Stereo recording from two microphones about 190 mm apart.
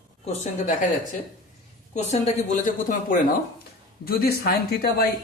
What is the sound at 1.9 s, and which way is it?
A woman's voice, 35° left (ahead or behind).